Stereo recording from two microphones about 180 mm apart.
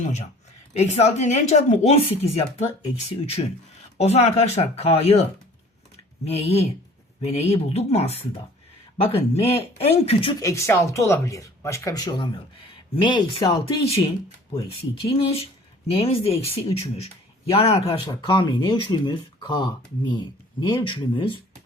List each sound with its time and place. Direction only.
0.7 s speech: 35° left (ahead or behind)
3.9 s speech: 35° left (ahead or behind)
6.2 s speech: 35° left (ahead or behind)
10.4 s speech: 15° left (ahead or behind)
15.0 s speech: 35° left (ahead or behind)